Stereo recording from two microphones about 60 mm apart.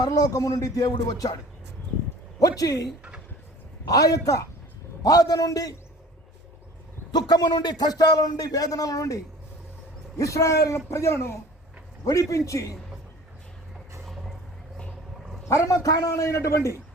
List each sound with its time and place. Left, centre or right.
0.0 s a man's voice: left
2.4 s a man's voice: left
3.8 s a man's voice: left
5.0 s speech: left
7.2 s a man's voice: left
12.0 s a man's voice: left
14.0 s vehicle: centre
15.4 s a man's voice: left